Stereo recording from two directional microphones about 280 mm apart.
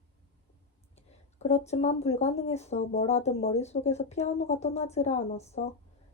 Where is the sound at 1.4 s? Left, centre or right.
Left.